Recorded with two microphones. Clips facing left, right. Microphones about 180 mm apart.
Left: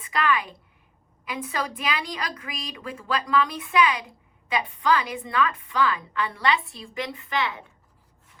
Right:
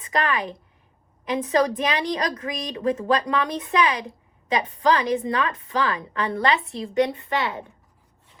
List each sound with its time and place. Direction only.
0.0 s a woman's voice: 40° right (ahead or behind)